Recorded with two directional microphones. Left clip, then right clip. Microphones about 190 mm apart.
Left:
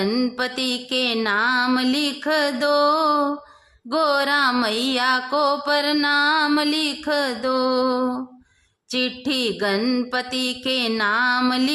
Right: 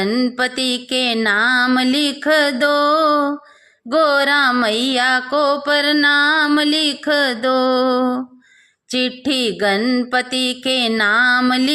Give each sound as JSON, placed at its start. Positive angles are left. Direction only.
{"t": 0.0, "sound": "music", "side_deg": -10}